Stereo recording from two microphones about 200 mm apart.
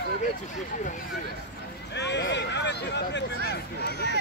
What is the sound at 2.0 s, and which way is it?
Speech, 60° left (ahead or behind).